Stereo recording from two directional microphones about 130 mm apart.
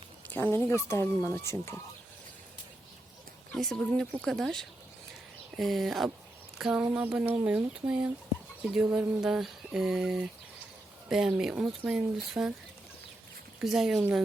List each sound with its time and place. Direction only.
0.3 s speech: 15° left (ahead or behind)
3.5 s speech: 5° left (ahead or behind)
13.6 s speech: 5° right (ahead or behind)